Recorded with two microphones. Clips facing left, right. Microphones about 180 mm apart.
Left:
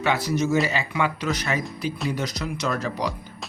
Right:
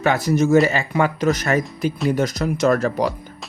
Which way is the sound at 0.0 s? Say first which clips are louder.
Right 5 dB; 45° right (ahead or behind).